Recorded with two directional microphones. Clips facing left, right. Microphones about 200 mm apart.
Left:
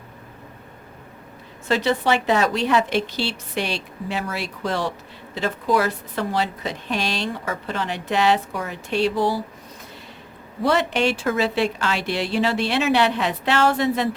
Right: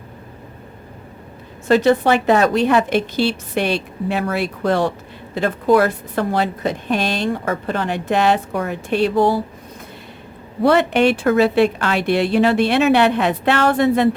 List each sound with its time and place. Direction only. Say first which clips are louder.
1.6 s a woman's voice: right 7 dB; 50° right (ahead or behind)
10.6 s a woman's voice: right 6 dB; 55° right (ahead or behind)